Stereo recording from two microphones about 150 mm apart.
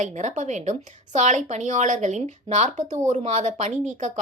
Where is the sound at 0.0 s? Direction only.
55° right (ahead or behind).